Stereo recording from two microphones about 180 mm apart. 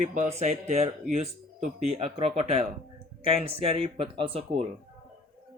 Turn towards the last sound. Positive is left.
turn(degrees=-35)  # may be behind; listen again after turning